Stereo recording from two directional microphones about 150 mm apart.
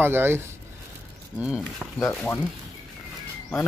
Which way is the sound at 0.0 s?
15° right (ahead or behind).